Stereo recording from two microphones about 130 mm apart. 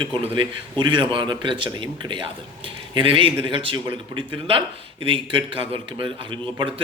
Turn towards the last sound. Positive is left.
turn(degrees=-40)  # may be behind; listen again after turning